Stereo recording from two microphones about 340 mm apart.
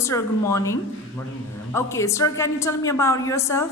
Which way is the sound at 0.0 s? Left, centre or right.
Centre.